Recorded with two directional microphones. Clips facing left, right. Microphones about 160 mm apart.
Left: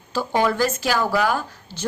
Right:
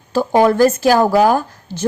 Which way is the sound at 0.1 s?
45° right (ahead or behind).